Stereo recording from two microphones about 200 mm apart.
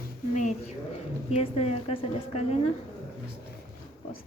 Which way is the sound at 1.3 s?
30° left (ahead or behind).